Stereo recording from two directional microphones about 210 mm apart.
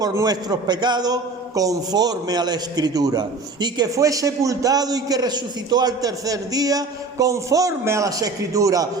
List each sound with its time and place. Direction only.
0.0 s a man's voice: 15° right (ahead or behind)